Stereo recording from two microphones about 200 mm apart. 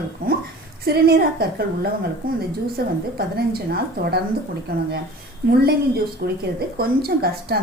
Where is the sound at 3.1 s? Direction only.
50° right (ahead or behind).